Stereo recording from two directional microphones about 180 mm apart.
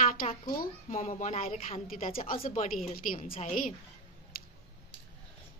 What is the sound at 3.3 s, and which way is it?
Speech, 45° left (ahead or behind).